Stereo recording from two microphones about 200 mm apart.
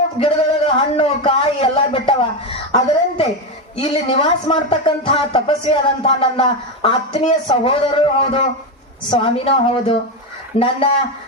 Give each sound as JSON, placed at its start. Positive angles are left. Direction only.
{"t": 0.2, "sound": "a man's voice", "side_deg": 25}